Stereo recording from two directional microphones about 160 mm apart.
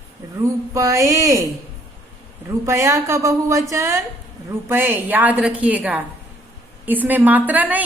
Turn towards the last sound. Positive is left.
turn(degrees=-10)  # may be behind; listen again after turning